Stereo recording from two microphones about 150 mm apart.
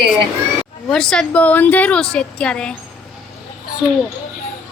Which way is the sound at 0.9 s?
5° left (ahead or behind).